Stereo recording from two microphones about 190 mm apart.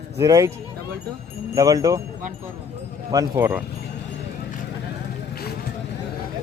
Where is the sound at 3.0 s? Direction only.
20° right (ahead or behind).